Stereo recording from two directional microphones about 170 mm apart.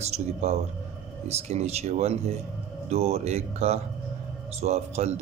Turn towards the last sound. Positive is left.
turn(degrees=-40)  # may be behind; listen again after turning